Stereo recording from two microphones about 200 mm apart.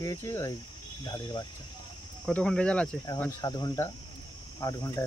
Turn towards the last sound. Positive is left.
turn(degrees=15)  # may be behind; listen again after turning